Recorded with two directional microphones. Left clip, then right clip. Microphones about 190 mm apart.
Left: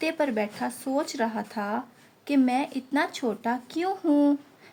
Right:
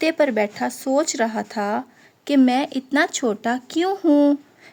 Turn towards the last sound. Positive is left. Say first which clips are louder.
# right 6 dB
turn(degrees=-40)  # may be behind; listen again after turning